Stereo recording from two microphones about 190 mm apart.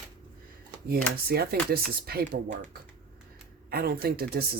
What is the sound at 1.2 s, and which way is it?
Speech, 55° right (ahead or behind).